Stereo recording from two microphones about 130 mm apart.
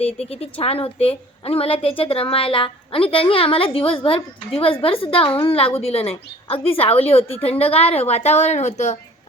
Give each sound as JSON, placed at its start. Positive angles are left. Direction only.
{"t": 0.0, "sound": "a woman's voice", "side_deg": 50}